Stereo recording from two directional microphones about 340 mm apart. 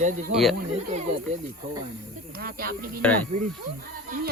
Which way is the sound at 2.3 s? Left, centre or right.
Right.